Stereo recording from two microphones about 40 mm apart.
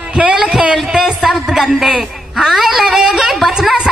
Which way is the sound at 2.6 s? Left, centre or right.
Centre.